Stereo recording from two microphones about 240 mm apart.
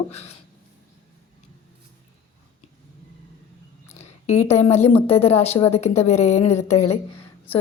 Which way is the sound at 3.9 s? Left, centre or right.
Left.